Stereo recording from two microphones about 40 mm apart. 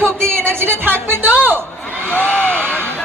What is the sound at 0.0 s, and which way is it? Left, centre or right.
Speech, right.